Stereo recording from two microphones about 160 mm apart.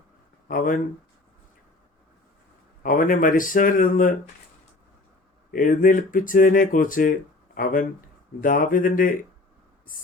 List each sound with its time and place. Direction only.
0.4 s speech: 60° left (ahead or behind)
2.8 s speech: 60° left (ahead or behind)
5.5 s speech: 60° left (ahead or behind)